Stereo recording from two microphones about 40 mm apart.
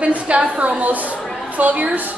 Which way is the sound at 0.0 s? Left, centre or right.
Right.